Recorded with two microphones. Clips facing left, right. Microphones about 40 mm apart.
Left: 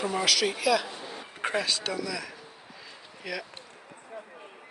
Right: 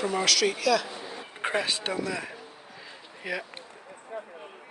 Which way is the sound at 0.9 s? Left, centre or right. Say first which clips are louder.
Right 1 dB; centre.